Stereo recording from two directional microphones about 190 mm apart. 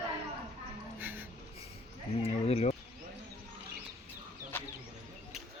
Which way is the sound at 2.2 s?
35° left (ahead or behind).